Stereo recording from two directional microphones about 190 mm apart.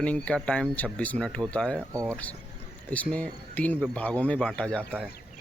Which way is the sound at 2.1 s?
10° left (ahead or behind).